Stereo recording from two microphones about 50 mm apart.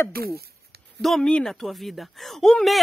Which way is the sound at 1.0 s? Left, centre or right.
Centre.